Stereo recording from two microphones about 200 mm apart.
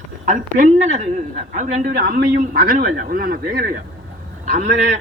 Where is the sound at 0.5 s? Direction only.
35° right (ahead or behind).